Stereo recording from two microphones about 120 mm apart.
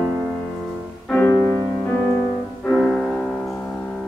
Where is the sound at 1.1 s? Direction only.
10° left (ahead or behind).